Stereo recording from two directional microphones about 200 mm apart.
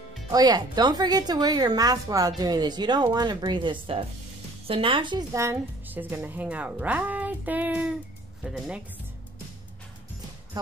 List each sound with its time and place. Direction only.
0.3 s a woman's voice: 20° right (ahead or behind); by 8.8 s 5° right (ahead or behind)